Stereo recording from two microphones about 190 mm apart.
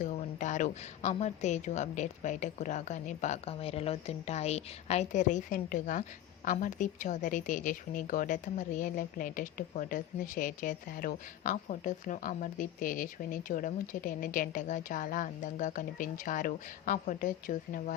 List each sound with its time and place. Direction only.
0.0 s a woman's voice: 40° left (ahead or behind)